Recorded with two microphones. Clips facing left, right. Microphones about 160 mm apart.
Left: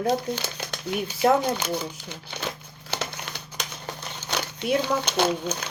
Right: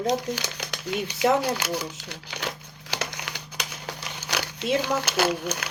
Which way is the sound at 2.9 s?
15° right (ahead or behind).